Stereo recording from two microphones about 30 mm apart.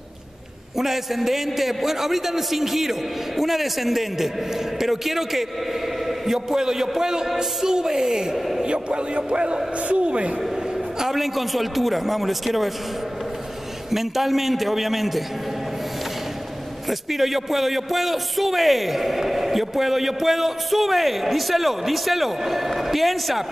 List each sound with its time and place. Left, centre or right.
0.7 s a man's voice: centre
8.6 s a man's voice: right
11.0 s a man's voice: centre
13.8 s a man's voice: centre
17.1 s a man's voice: centre